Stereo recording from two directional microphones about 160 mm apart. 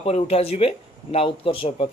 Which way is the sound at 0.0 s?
35° left (ahead or behind).